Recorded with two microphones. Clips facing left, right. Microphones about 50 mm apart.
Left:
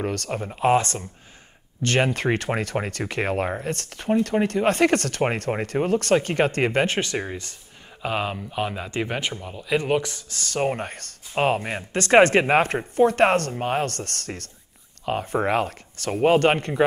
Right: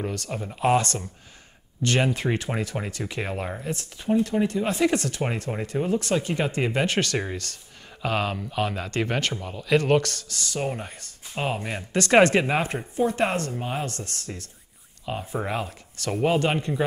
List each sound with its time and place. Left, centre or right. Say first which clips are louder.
0.1 s speech: left 4 dB; left
0.5 s speech: left 2 dB; left
3.6 s speech: left 2 dB; left
5.5 s speech: left 3 dB; left
8.0 s speech: even; centre
9.6 s speech: right 2 dB; centre
10.3 s speech: left 5 dB; left
11.3 s speech: left 6 dB; left